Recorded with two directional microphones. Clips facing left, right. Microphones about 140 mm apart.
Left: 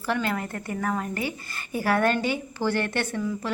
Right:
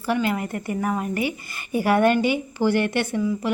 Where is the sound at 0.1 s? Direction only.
10° right (ahead or behind).